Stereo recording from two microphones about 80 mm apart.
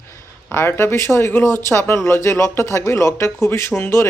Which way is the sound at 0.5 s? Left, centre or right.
Left.